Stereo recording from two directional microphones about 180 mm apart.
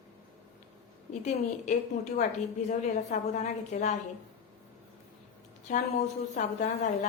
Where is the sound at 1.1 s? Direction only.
40° left (ahead or behind).